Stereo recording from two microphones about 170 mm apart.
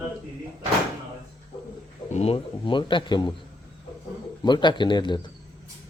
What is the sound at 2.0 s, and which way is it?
A man's voice, 40° left (ahead or behind).